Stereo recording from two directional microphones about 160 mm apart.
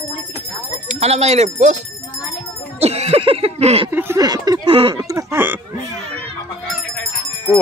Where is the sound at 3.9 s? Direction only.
15° right (ahead or behind).